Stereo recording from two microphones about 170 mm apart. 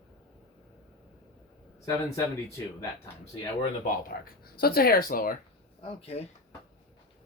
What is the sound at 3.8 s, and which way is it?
Speech, 60° left (ahead or behind).